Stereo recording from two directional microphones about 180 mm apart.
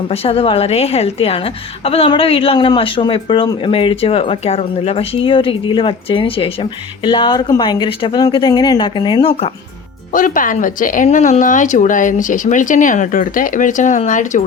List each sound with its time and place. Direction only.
0.1 s a woman's voice: 35° left (ahead or behind)
10.1 s speech: 50° left (ahead or behind)